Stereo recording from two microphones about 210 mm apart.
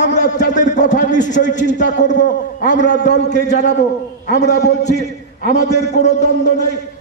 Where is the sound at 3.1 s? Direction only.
55° left (ahead or behind).